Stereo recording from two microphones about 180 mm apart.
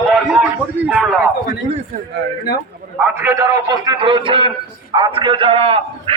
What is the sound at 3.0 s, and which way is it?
A man's voice, 15° right (ahead or behind).